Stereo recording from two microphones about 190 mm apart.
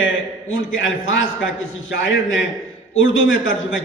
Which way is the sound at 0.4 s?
90° left.